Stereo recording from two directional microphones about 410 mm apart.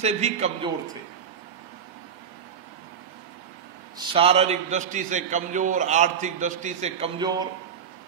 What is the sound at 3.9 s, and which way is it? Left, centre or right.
A man's voice, centre.